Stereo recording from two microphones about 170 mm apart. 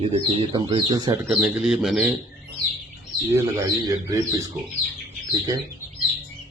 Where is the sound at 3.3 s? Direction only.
15° right (ahead or behind).